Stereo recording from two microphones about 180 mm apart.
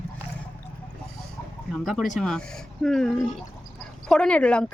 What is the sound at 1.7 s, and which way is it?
Speech, centre (ahead or behind).